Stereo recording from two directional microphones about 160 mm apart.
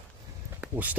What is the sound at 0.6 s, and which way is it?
Speech, 10° right (ahead or behind).